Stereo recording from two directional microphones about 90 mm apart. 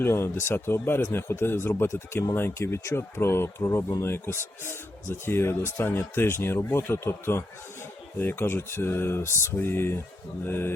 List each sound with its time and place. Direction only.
0.0 s speech: 30° left (ahead or behind)